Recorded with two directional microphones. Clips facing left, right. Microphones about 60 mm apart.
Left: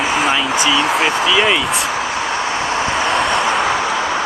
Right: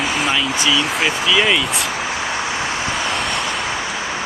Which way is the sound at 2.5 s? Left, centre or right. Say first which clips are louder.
Left 4 dB; left.